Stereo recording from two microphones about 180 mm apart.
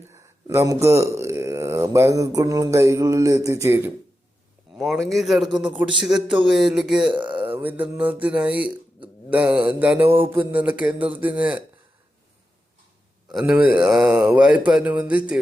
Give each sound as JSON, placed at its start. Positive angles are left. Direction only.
{"t": 0.1, "sound": "speech", "side_deg": -15}
{"t": 4.8, "sound": "a man's voice", "side_deg": 0}
{"t": 7.1, "sound": "speech", "side_deg": -25}
{"t": 7.4, "sound": "speech", "side_deg": -10}
{"t": 10.1, "sound": "a sound", "side_deg": -30}
{"t": 10.4, "sound": "speech", "side_deg": -10}
{"t": 13.3, "sound": "speech", "side_deg": -5}